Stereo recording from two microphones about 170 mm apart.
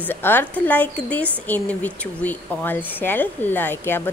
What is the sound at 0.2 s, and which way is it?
Speech, 10° left (ahead or behind).